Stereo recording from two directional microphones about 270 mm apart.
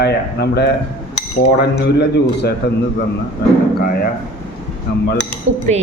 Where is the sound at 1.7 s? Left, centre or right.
Left.